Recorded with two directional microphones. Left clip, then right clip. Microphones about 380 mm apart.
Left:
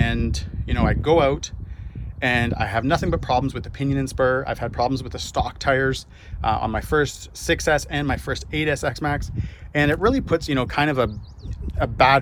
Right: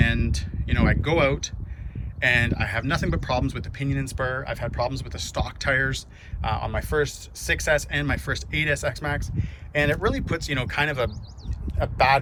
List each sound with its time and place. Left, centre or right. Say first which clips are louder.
0.0 s speech: even; centre